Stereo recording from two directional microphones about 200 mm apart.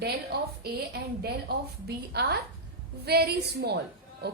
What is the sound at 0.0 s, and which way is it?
A woman's voice, 55° right (ahead or behind).